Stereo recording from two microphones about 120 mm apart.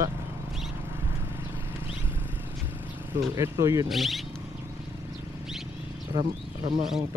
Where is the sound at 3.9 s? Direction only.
Centre (ahead or behind).